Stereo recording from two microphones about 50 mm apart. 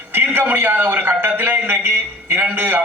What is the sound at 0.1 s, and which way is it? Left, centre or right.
A man's voice, right.